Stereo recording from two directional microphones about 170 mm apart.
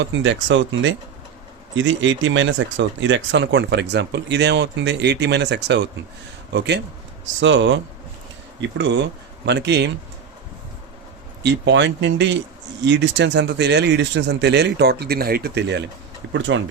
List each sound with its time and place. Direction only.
0.0 s speech: 90° right
8.8 s speech: 90° right
11.4 s speech: 90° right
16.2 s speech: 90° right